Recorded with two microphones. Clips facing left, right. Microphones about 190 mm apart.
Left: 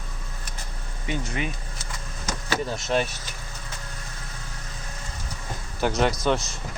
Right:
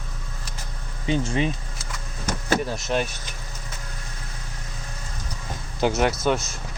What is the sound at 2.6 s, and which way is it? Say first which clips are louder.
Speech: even; centre (ahead or behind).